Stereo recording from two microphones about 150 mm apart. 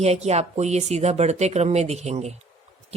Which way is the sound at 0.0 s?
45° right (ahead or behind).